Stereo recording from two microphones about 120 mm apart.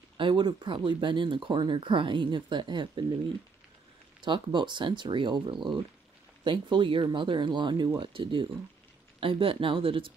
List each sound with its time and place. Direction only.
0.2 s speech: 40° right (ahead or behind)
4.2 s speech: 40° right (ahead or behind)